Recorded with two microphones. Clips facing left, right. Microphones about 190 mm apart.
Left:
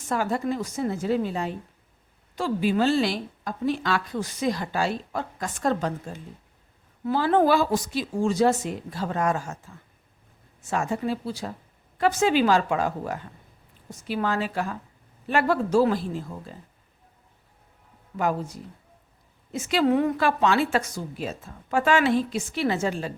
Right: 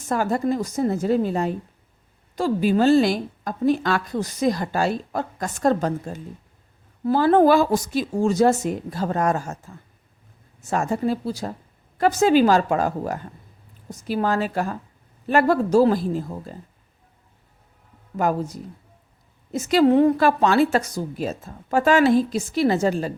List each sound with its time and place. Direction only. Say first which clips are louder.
0.1 s a woman's voice: right 4 dB; 45° right (ahead or behind)
18.2 s a woman's voice: right 4 dB; 40° right (ahead or behind)